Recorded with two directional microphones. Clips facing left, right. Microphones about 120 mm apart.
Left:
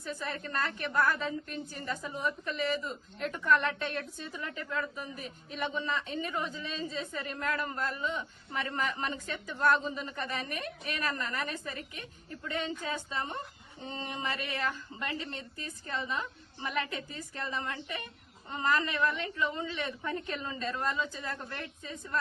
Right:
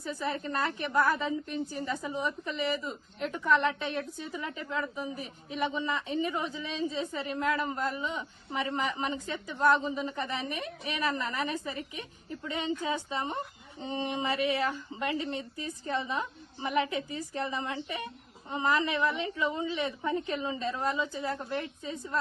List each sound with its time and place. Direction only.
0.1 s a woman's voice: 15° right (ahead or behind)